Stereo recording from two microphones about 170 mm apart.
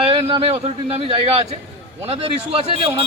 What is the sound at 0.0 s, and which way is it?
A man's voice, 30° right (ahead or behind).